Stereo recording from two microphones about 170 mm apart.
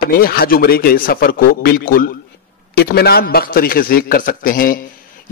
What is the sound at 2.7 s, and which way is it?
A man's voice, 70° left (ahead or behind).